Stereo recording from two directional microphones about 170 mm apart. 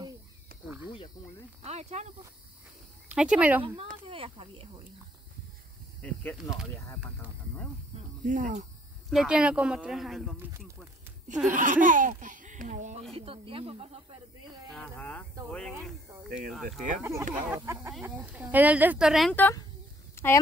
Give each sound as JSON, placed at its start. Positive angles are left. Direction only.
{"t": 1.6, "sound": "speech", "side_deg": -40}
{"t": 3.1, "sound": "speech", "side_deg": -5}
{"t": 4.1, "sound": "speech", "side_deg": -30}
{"t": 6.0, "sound": "speech", "side_deg": 5}
{"t": 8.2, "sound": "speech", "side_deg": -50}
{"t": 9.1, "sound": "speech", "side_deg": -5}
{"t": 11.4, "sound": "speech", "side_deg": -50}
{"t": 13.1, "sound": "speech", "side_deg": -35}
{"t": 14.7, "sound": "speech", "side_deg": 5}
{"t": 17.0, "sound": "speech", "side_deg": -15}
{"t": 19.3, "sound": "speech", "side_deg": 10}
{"t": 20.2, "sound": "a sound", "side_deg": 15}